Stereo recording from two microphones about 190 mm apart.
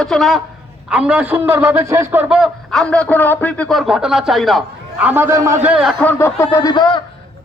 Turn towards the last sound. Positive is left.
turn(degrees=20)  # may be behind; listen again after turning